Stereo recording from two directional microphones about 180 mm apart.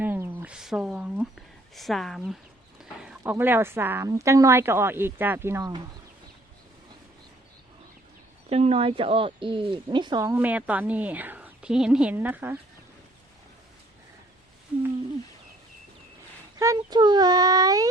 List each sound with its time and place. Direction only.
0.0 s a sound: 10° right (ahead or behind)
3.0 s speech: 5° right (ahead or behind)
8.4 s speech: 35° right (ahead or behind); by 12.5 s 10° right (ahead or behind)
16.6 s speech: 20° right (ahead or behind)